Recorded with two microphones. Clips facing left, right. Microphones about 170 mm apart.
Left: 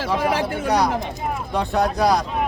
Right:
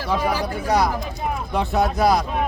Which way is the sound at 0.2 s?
75° left (ahead or behind).